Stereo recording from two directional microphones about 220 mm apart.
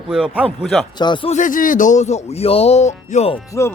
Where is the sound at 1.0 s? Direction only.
20° left (ahead or behind).